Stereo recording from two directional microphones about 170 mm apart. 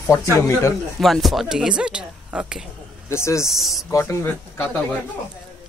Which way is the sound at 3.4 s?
Centre (ahead or behind).